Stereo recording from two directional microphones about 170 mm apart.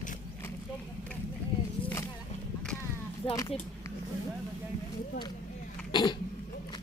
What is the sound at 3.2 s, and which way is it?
Speech, 30° left (ahead or behind).